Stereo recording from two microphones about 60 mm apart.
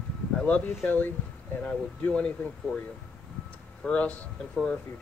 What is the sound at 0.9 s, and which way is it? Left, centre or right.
Speech, left.